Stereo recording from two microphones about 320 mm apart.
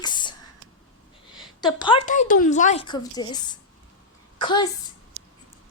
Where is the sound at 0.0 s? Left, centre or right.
Centre.